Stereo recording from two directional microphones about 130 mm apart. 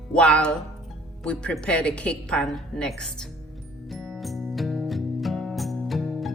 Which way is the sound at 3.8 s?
Centre (ahead or behind).